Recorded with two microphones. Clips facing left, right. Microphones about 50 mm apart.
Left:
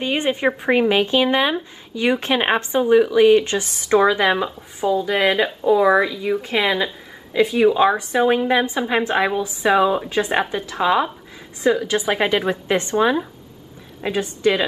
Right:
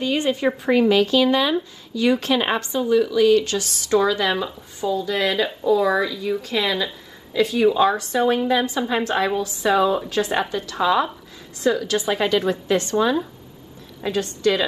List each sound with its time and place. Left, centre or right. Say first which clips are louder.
0.0 s speech: left 1 dB; left